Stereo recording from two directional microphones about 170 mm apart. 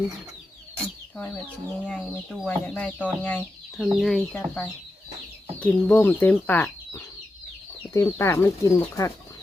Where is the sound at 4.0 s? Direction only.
Centre (ahead or behind).